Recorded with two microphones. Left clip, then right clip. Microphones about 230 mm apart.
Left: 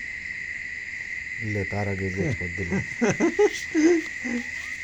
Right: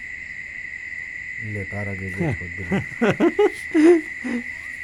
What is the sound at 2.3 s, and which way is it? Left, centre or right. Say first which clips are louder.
Owl: right 2 dB; right.